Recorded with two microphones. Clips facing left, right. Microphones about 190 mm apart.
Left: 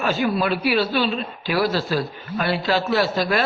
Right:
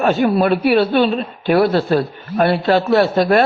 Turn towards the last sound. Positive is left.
turn(degrees=-55)  # may be behind; listen again after turning